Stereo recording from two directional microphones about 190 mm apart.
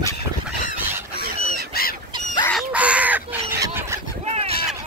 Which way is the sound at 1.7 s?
50° left (ahead or behind).